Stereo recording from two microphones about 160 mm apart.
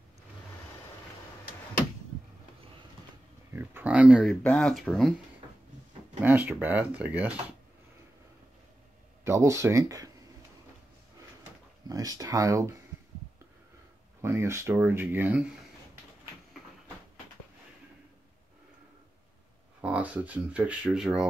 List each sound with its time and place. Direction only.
3.5 s speech: 10° right (ahead or behind)
6.2 s speech: 10° right (ahead or behind)
9.2 s speech: 15° right (ahead or behind)
11.9 s speech: 25° right (ahead or behind)
14.2 s speech: 20° right (ahead or behind)
19.8 s speech: 10° right (ahead or behind)